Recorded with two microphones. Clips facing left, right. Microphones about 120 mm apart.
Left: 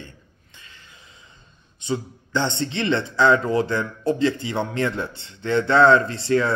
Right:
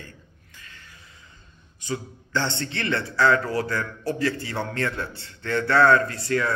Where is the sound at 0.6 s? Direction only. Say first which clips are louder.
Even; 20° left (ahead or behind).